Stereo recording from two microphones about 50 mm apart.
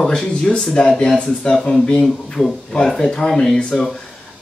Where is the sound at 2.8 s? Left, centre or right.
Centre.